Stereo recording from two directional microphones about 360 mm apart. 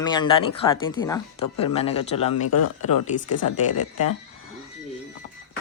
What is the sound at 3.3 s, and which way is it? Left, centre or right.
Speech, left.